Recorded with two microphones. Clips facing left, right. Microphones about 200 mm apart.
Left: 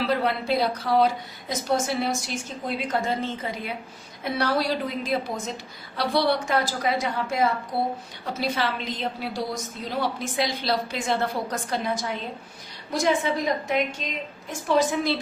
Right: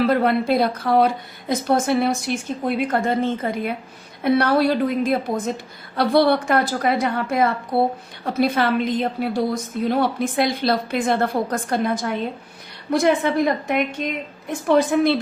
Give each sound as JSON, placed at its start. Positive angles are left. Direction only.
{"t": 0.0, "sound": "a woman's voice", "side_deg": -55}